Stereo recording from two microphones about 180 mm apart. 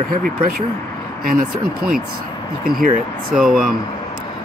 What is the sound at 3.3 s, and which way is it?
Speech, 5° right (ahead or behind).